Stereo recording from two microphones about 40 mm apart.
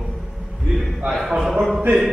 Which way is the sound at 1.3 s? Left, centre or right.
Centre.